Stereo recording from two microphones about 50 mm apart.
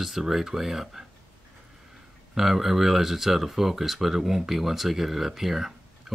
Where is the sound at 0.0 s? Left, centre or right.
Centre.